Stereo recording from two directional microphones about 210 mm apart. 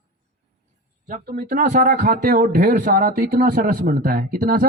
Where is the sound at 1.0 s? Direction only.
40° right (ahead or behind).